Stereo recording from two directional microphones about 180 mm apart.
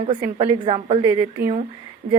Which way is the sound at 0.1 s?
30° right (ahead or behind).